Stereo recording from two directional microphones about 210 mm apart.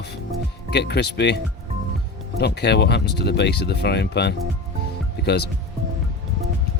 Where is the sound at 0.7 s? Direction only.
55° left (ahead or behind).